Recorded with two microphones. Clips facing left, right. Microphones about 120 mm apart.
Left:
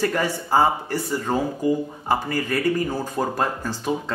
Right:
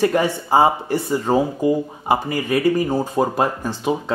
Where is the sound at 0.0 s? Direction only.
20° right (ahead or behind).